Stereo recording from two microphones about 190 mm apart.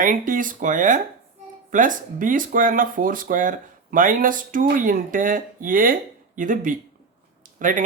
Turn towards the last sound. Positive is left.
turn(degrees=-45)  # may be behind; listen again after turning